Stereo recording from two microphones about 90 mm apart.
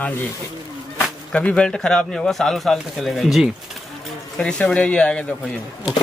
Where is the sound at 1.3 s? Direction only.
10° left (ahead or behind).